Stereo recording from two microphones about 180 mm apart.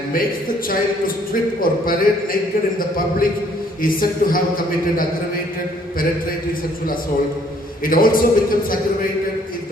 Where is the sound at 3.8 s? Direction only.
50° left (ahead or behind).